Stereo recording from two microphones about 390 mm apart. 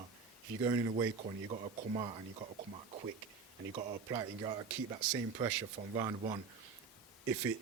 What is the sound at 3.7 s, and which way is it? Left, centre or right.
Speech, centre.